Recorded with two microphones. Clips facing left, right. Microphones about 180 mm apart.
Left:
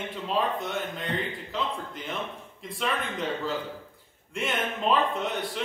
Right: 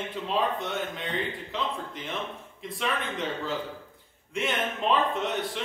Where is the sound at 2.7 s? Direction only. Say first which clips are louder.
Even; centre (ahead or behind).